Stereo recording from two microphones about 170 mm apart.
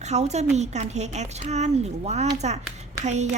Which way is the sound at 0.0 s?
40° right (ahead or behind).